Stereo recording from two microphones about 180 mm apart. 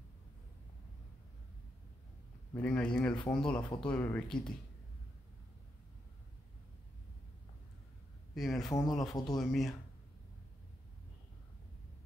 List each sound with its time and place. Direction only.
2.5 s speech: 5° left (ahead or behind)
8.4 s speech: centre (ahead or behind)
8.6 s speech: 20° left (ahead or behind)
8.9 s speech: centre (ahead or behind)